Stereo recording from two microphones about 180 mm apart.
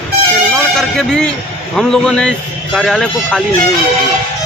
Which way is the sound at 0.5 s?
5° left (ahead or behind).